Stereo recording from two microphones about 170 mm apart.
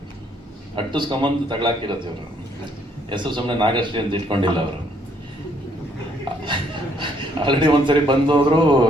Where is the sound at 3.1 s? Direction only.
30° right (ahead or behind).